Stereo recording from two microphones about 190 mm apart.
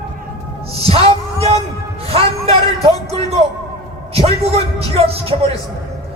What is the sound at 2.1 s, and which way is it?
Music, 30° right (ahead or behind).